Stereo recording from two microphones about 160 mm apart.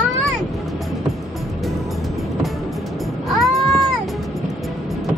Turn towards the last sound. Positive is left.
turn(degrees=0)  # may be behind; listen again after turning